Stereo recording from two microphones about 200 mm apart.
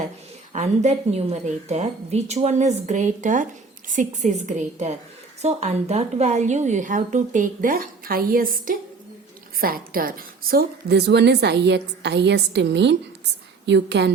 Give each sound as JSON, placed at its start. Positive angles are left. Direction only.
{"t": 0.5, "sound": "a woman's voice", "side_deg": -35}